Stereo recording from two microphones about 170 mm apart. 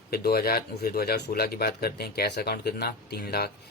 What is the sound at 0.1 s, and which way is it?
Speech, 65° left (ahead or behind).